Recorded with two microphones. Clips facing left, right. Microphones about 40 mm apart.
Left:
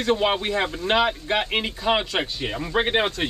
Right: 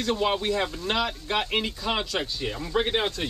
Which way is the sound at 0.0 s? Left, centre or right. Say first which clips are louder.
Left 3 dB; left.